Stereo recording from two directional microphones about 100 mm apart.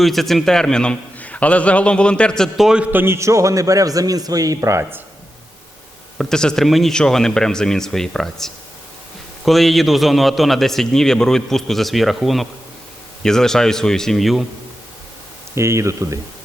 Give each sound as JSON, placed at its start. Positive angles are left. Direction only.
{"t": 0.0, "sound": "a man's voice", "side_deg": 0}
{"t": 2.6, "sound": "a man's voice", "side_deg": -10}
{"t": 6.1, "sound": "a man's voice", "side_deg": 5}
{"t": 15.5, "sound": "speech", "side_deg": -30}